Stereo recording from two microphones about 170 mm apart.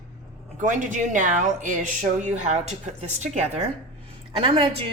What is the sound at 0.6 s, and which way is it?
A woman's voice, 50° right (ahead or behind).